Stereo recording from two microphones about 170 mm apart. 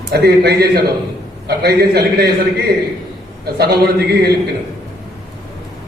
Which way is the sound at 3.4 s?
65° right (ahead or behind).